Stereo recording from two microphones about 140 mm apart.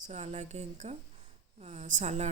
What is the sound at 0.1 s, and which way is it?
A woman's voice, 55° right (ahead or behind).